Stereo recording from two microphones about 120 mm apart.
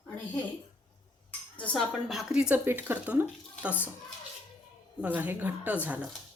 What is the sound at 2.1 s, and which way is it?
A woman's voice, centre (ahead or behind).